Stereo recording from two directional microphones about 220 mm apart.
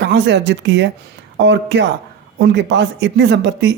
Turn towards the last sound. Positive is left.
turn(degrees=-50)  # may be behind; listen again after turning